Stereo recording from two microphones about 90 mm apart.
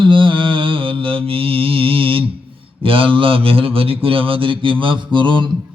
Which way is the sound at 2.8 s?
80° right.